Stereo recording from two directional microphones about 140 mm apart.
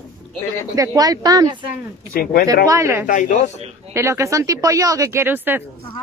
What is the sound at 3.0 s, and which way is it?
Speech, 65° left (ahead or behind).